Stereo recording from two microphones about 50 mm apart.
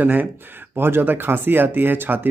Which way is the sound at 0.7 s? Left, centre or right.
Right.